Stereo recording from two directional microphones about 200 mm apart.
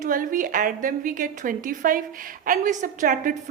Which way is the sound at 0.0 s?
40° right (ahead or behind).